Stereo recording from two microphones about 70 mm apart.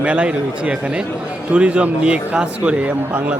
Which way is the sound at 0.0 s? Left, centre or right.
Centre.